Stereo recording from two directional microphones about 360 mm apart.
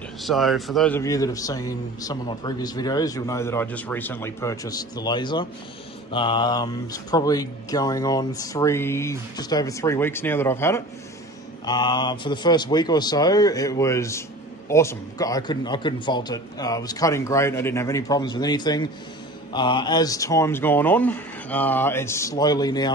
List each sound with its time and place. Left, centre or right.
0.2 s a man's voice: centre